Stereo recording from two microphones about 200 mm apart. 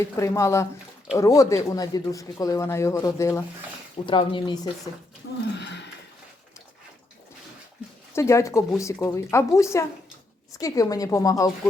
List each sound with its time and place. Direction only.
0.2 s speech: 15° left (ahead or behind)
5.2 s a sound: 75° left (ahead or behind)
8.1 s speech: 15° left (ahead or behind)